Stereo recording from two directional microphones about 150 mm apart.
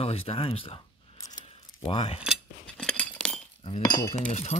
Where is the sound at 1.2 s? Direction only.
25° left (ahead or behind).